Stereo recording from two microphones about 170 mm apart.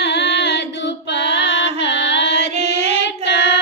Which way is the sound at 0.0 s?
90° left.